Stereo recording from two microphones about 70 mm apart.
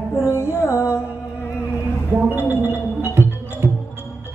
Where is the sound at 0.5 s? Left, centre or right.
Left.